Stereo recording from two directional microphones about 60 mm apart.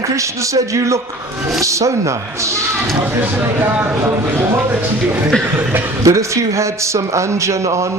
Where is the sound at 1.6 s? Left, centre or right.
Right.